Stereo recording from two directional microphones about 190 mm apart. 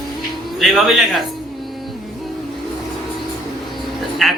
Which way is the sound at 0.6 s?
Centre (ahead or behind).